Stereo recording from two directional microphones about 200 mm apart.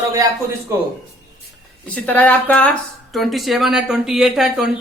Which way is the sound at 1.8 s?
5° left (ahead or behind).